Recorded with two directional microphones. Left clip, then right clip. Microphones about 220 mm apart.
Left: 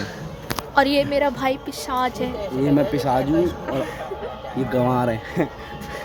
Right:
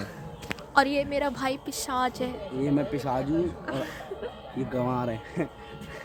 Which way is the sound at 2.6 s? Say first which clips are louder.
Left 8 dB; 5° right (ahead or behind).